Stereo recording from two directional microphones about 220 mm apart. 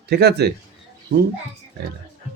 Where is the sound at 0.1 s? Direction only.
50° right (ahead or behind).